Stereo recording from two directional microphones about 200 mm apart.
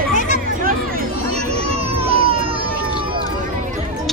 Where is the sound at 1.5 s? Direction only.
30° right (ahead or behind).